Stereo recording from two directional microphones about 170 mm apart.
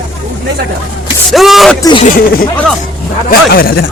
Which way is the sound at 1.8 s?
25° left (ahead or behind).